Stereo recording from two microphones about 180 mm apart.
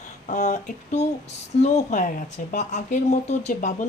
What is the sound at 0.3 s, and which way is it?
A woman's voice, 40° left (ahead or behind).